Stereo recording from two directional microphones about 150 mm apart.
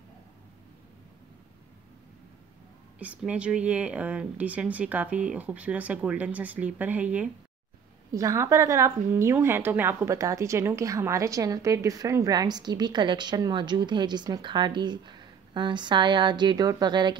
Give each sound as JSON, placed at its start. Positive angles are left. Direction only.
{"t": 3.0, "sound": "speech", "side_deg": -10}
{"t": 8.1, "sound": "a woman's voice", "side_deg": -20}